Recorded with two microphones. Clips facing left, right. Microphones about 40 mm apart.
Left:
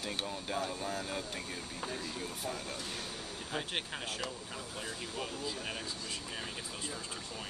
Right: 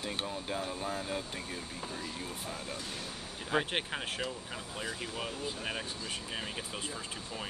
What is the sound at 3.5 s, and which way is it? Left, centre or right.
Speech, right.